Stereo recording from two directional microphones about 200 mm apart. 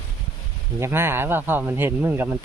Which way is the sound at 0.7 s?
10° right (ahead or behind).